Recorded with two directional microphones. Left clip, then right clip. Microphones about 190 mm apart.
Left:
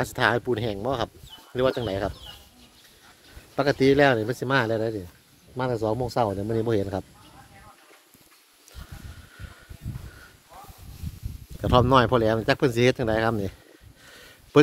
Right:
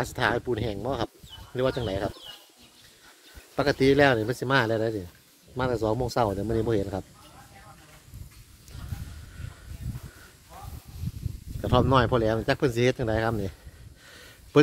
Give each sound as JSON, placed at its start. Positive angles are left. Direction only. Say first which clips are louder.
{"t": 0.0, "sound": "speech", "louder": "left 3 dB", "side_deg": 25}
{"t": 3.5, "sound": "speech", "louder": "left 1 dB", "side_deg": 10}
{"t": 6.6, "sound": "speech", "louder": "left 4 dB", "side_deg": 15}
{"t": 11.6, "sound": "speech", "louder": "left 3 dB", "side_deg": 25}
{"t": 14.0, "sound": "a sound", "louder": "even", "side_deg": 10}